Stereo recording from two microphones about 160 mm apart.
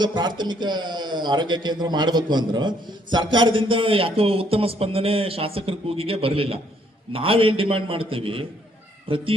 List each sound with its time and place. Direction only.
0.0 s a man's voice: 30° right (ahead or behind)